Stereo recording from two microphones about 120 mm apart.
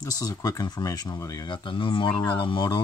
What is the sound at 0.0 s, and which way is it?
Speech, 30° left (ahead or behind).